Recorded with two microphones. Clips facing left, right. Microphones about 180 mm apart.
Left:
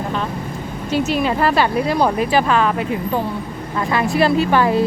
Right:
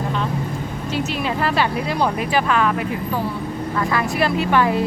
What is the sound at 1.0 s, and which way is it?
Speech, 40° left (ahead or behind).